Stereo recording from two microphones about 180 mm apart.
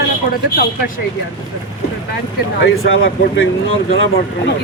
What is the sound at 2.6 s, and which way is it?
Speech, 65° left (ahead or behind).